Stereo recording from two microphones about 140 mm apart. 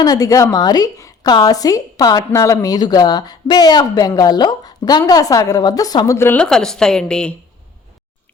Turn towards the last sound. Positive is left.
turn(degrees=5)  # may be behind; listen again after turning